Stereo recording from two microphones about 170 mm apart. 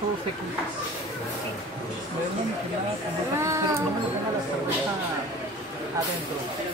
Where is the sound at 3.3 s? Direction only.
15° right (ahead or behind).